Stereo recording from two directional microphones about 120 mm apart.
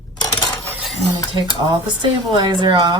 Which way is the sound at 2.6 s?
40° right (ahead or behind).